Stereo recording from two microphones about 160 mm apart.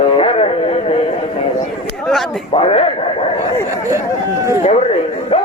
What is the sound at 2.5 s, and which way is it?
Speech, 35° left (ahead or behind).